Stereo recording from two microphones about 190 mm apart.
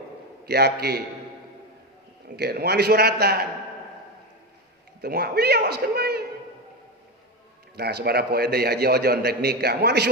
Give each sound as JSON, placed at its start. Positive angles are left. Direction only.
{"t": 0.4, "sound": "a man's voice", "side_deg": -55}
{"t": 2.3, "sound": "a man's voice", "side_deg": -60}
{"t": 5.0, "sound": "a man's voice", "side_deg": -55}
{"t": 7.8, "sound": "a man's voice", "side_deg": -55}